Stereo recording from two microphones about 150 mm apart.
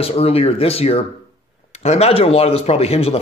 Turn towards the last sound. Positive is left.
turn(degrees=45)  # may be behind; listen again after turning